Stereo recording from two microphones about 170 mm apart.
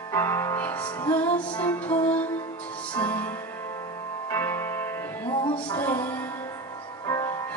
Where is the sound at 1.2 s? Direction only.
30° left (ahead or behind).